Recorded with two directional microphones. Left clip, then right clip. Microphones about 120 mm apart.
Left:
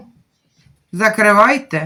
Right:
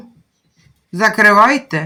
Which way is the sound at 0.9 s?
25° right (ahead or behind).